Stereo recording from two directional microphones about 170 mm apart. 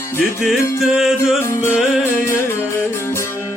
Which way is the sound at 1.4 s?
15° left (ahead or behind).